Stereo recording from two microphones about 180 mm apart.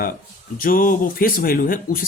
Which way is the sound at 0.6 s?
50° left (ahead or behind).